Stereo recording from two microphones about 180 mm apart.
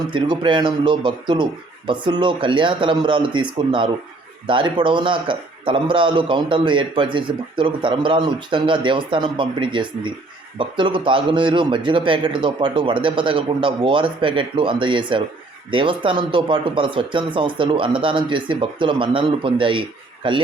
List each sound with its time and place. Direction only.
0.1 s a man's voice: 25° right (ahead or behind)